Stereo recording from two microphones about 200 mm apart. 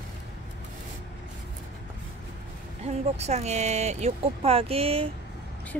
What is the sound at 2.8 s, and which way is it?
Speech, 35° right (ahead or behind).